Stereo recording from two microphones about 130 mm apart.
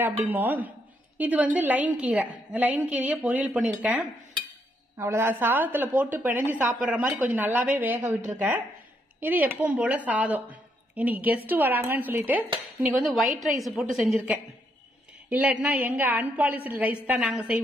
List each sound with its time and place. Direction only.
0.0 s a woman's voice: 15° right (ahead or behind)
4.9 s a woman's voice: 20° right (ahead or behind)
8.0 s a woman's voice: 65° right (ahead or behind)
9.2 s a woman's voice: 15° right (ahead or behind)
13.0 s a woman's voice: centre (ahead or behind)
15.2 s a woman's voice: 10° right (ahead or behind)